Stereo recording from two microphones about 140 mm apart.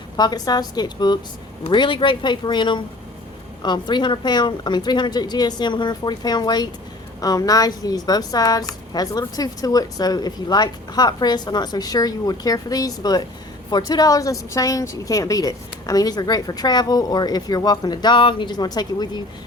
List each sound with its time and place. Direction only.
0.2 s a woman's voice: 30° left (ahead or behind)